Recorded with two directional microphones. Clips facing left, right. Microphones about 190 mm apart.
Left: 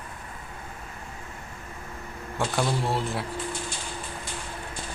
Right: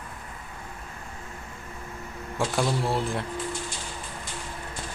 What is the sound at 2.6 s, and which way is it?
Speech, centre (ahead or behind).